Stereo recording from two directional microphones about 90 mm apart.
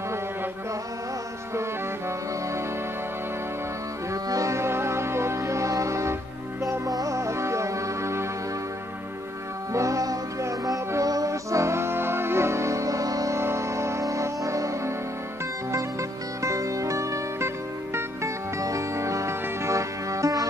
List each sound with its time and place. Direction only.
4.1 s music: 40° right (ahead or behind)
9.7 s music: 35° right (ahead or behind)